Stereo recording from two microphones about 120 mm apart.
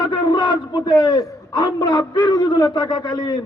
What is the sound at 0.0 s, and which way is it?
A man's voice, 35° left (ahead or behind).